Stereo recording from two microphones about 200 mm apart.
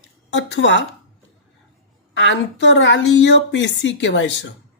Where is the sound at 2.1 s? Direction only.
65° left (ahead or behind).